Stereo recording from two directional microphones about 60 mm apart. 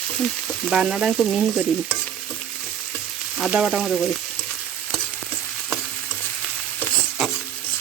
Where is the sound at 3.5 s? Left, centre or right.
Centre.